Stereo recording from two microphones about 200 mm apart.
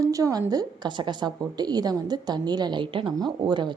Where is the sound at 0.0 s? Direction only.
15° right (ahead or behind).